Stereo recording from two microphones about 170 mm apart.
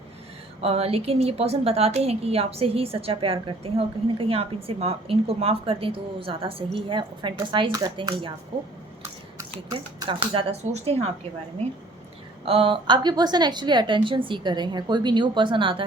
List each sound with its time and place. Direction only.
0.6 s a woman's voice: 35° right (ahead or behind)
9.4 s speech: 25° right (ahead or behind)
10.6 s a woman's voice: 40° right (ahead or behind)
12.5 s a woman's voice: 30° right (ahead or behind)